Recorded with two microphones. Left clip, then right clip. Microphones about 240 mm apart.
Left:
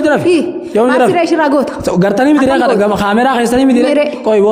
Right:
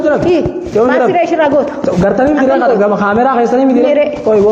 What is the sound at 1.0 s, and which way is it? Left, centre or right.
Speech, left.